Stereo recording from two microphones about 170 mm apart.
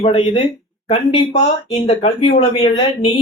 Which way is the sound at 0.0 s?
30° left (ahead or behind).